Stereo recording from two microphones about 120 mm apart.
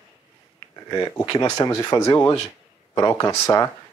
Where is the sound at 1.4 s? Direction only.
30° left (ahead or behind).